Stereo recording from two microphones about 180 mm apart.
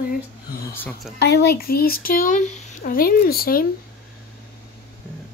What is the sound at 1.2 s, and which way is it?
Speech, 60° left (ahead or behind).